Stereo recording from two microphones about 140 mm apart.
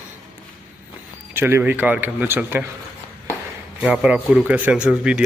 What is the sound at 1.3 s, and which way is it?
Speech, 15° right (ahead or behind).